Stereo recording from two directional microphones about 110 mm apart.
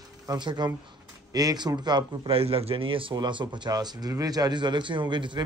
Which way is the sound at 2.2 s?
60° right (ahead or behind).